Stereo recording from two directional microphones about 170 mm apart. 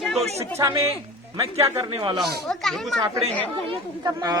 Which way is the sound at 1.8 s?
25° right (ahead or behind).